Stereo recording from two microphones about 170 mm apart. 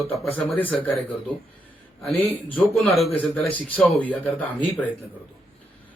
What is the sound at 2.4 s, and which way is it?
Speech, 10° left (ahead or behind).